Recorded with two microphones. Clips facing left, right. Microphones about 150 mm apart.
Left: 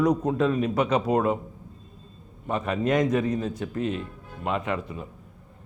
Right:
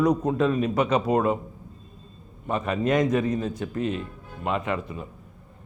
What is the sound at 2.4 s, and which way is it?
A man's voice, 20° right (ahead or behind).